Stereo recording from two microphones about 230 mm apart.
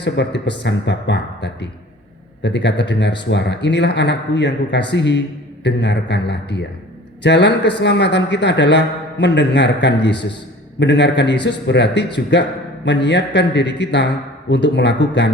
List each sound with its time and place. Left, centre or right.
0.0 s speech: left